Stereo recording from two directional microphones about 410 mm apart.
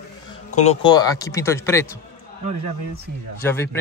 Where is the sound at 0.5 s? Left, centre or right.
Centre.